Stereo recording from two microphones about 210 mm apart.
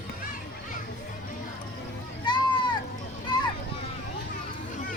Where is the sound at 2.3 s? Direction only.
20° left (ahead or behind).